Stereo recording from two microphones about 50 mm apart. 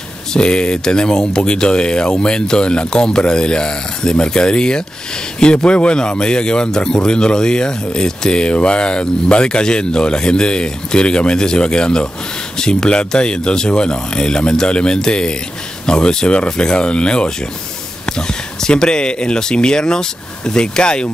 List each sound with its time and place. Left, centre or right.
0.3 s speech: centre